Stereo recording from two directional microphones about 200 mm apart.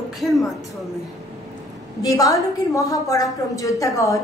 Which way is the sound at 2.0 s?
15° left (ahead or behind).